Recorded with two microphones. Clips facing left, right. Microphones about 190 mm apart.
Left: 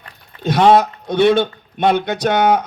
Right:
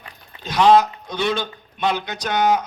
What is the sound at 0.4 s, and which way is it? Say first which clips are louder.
Speech: left 3 dB; 60° left (ahead or behind).